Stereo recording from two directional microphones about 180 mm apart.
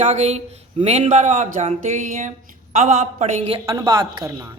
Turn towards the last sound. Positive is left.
turn(degrees=-15)  # may be behind; listen again after turning